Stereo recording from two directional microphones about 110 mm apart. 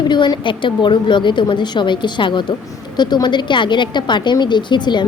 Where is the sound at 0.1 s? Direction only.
45° left (ahead or behind).